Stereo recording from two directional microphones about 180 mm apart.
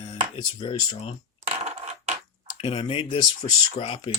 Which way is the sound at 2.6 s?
30° left (ahead or behind).